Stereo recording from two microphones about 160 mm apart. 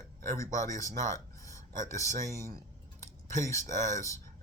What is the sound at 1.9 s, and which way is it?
Speech, 15° left (ahead or behind).